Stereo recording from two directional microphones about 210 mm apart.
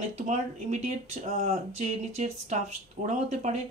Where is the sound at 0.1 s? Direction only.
35° right (ahead or behind).